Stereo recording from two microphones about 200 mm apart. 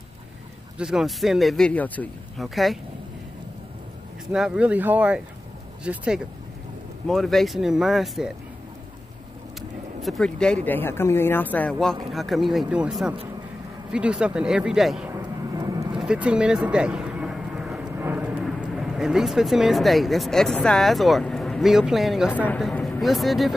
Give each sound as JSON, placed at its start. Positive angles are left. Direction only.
{"t": 0.7, "sound": "speech", "side_deg": 0}
{"t": 4.3, "sound": "speech", "side_deg": -5}
{"t": 9.6, "sound": "speech", "side_deg": 0}
{"t": 15.0, "sound": "vehicle", "side_deg": -15}
{"t": 16.0, "sound": "speech", "side_deg": -5}